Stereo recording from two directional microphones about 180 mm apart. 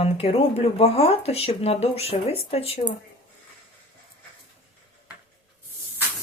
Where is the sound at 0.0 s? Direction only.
35° left (ahead or behind).